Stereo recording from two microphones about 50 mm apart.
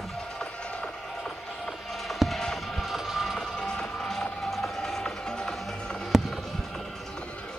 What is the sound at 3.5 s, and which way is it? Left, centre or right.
Music, centre.